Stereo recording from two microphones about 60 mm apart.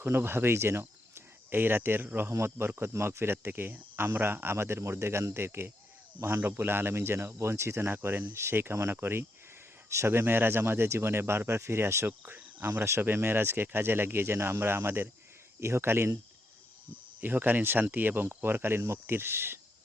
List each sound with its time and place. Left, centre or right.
0.0 s speech: right
3.4 s speech: right
12.0 s cricket: right
12.8 s speech: right
17.2 s speech: right